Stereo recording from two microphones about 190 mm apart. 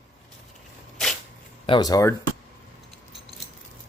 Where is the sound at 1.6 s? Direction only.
25° left (ahead or behind).